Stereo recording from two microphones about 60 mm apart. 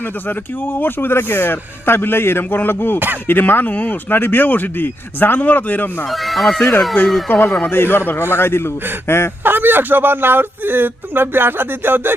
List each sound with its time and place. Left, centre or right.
0.3 s speech: left
6.1 s speech: centre
7.3 s a man's voice: left
9.4 s a man's voice: right